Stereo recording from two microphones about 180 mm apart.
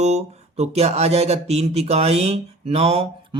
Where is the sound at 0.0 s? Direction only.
40° right (ahead or behind).